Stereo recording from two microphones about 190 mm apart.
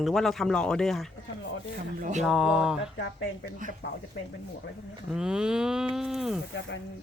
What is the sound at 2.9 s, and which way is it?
Speech, 70° left (ahead or behind).